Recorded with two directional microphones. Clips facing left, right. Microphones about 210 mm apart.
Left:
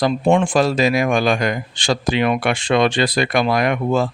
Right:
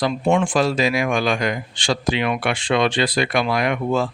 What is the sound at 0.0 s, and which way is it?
Speech, 35° left (ahead or behind).